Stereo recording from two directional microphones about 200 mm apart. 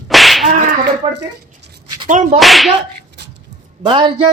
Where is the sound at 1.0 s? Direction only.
30° right (ahead or behind).